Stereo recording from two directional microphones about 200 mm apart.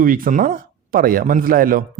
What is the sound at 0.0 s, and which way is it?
Speech, 45° right (ahead or behind).